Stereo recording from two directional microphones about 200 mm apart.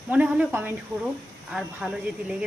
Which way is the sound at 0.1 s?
5° right (ahead or behind).